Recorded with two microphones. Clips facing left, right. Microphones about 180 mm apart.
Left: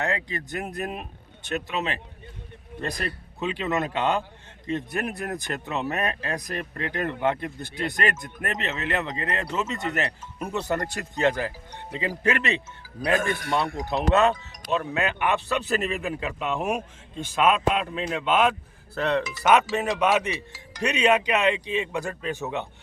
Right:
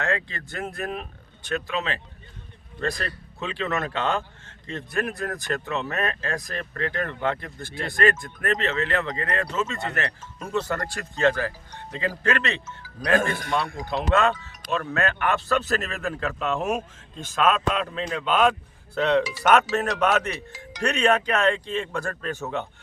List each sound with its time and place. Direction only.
0.0 s a man's voice: 20° left (ahead or behind)